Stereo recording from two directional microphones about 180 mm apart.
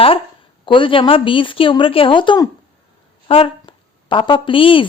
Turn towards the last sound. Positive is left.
turn(degrees=30)  # may be behind; listen again after turning